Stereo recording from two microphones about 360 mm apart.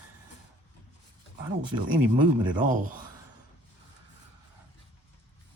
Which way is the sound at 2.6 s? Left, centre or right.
Right.